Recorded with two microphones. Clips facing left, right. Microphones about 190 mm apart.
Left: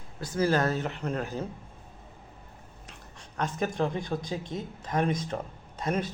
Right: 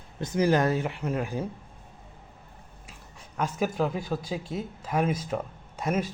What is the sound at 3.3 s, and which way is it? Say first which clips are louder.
A man's voice: right 2 dB; 5° right (ahead or behind).